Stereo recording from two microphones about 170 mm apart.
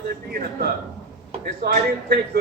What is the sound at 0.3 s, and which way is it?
A man's voice, 65° right (ahead or behind).